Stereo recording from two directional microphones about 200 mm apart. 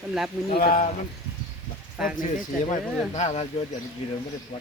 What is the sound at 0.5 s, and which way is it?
Speech, 40° left (ahead or behind).